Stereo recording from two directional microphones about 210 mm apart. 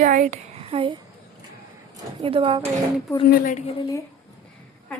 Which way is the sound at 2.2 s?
25° right (ahead or behind).